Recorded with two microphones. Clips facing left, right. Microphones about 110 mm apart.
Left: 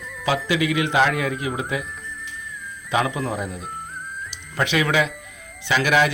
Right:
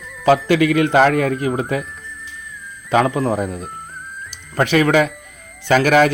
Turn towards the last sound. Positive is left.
turn(degrees=-45)  # may be behind; listen again after turning